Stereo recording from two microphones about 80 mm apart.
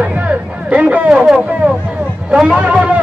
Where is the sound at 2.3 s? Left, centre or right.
Centre.